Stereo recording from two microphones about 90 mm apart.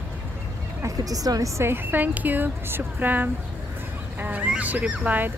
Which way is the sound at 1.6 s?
20° right (ahead or behind).